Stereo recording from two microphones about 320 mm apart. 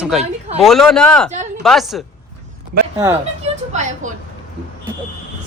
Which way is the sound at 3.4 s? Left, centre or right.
Right.